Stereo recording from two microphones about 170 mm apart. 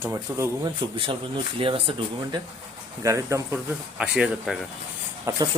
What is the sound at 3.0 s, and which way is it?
Speech, 15° right (ahead or behind).